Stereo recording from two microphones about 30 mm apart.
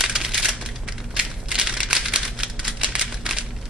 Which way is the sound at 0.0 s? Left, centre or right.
Centre.